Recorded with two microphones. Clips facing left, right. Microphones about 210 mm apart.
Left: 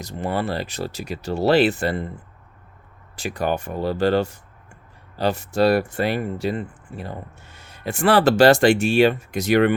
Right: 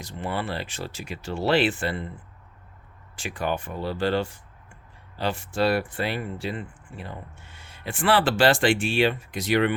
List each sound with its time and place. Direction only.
0.0 s speech: 40° left (ahead or behind)